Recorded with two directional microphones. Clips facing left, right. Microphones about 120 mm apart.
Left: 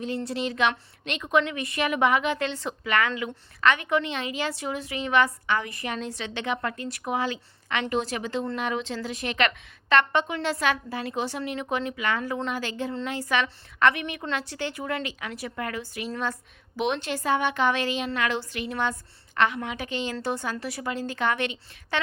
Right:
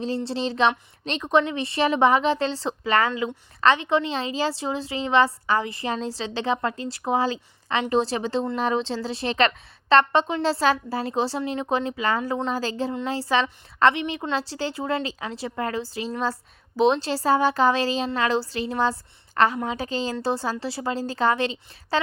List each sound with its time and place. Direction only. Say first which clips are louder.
0.3 s a woman's voice: right 4 dB; 30° right (ahead or behind)